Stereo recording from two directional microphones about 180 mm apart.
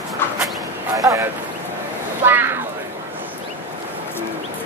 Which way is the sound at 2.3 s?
10° right (ahead or behind).